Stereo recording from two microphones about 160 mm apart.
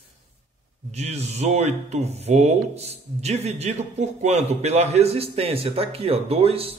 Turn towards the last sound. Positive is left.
turn(degrees=-35)  # may be behind; listen again after turning